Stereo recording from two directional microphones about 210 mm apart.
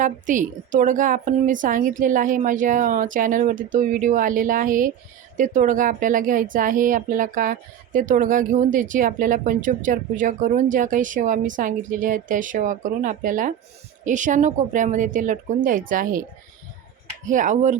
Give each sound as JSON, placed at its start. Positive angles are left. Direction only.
{"t": 0.0, "sound": "speech", "side_deg": -40}
{"t": 17.2, "sound": "speech", "side_deg": -35}